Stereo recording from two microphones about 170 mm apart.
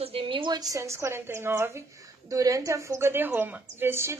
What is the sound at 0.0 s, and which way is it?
A woman's voice, 30° right (ahead or behind).